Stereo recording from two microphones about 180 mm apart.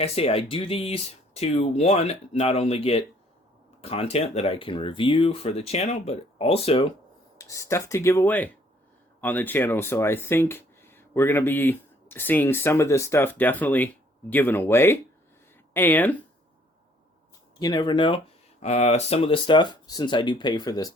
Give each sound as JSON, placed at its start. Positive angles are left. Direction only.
{"t": 0.0, "sound": "speech", "side_deg": 35}
{"t": 7.3, "sound": "speech", "side_deg": 15}
{"t": 17.6, "sound": "speech", "side_deg": 20}
{"t": 18.6, "sound": "speech", "side_deg": 40}